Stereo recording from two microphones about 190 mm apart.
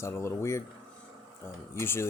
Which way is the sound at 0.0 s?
15° left (ahead or behind).